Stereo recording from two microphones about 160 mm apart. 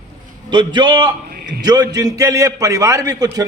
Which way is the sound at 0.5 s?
30° right (ahead or behind).